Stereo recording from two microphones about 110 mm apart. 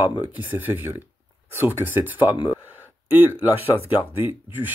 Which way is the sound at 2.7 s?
15° right (ahead or behind).